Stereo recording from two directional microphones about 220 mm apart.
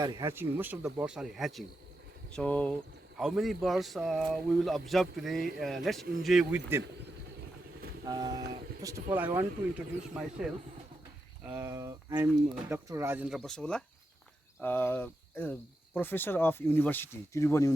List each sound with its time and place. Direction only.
0.0 s speech: 15° right (ahead or behind)
8.0 s speech: 20° right (ahead or behind); by 17.7 s 15° left (ahead or behind)